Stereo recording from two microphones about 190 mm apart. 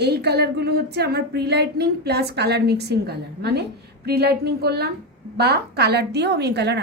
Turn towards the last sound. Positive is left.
turn(degrees=-60)  # may be behind; listen again after turning